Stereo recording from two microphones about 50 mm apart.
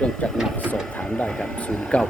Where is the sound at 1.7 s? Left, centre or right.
Centre.